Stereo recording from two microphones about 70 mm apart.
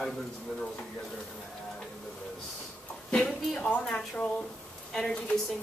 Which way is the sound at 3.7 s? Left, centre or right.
Centre.